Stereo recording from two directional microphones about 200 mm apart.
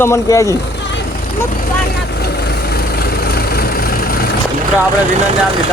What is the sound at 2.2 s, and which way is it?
Vehicle, 55° left (ahead or behind).